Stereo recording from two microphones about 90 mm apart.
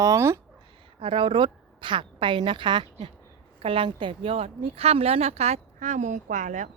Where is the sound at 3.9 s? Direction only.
70° right (ahead or behind); by 5.2 s 90° right.